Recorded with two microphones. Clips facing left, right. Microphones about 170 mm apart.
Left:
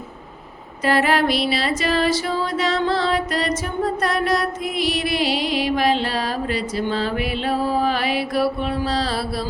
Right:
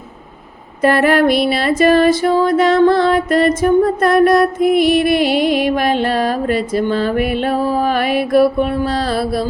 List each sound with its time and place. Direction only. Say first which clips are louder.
0.8 s music: right 6 dB; 55° right (ahead or behind)